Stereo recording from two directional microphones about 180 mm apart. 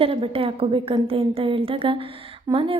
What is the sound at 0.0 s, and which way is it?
A woman's voice, 30° right (ahead or behind).